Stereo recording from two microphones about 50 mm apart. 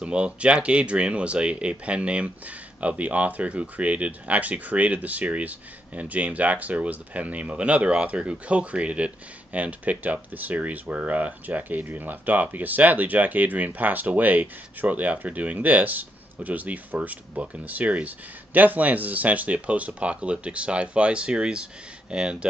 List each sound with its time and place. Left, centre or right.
0.0 s speech: right